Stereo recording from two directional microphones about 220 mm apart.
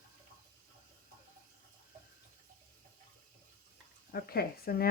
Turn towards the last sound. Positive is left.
turn(degrees=45)  # may be behind; listen again after turning